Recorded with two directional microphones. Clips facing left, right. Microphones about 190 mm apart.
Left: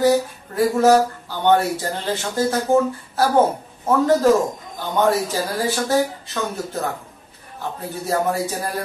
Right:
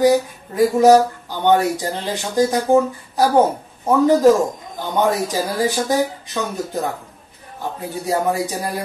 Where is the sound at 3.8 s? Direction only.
15° right (ahead or behind).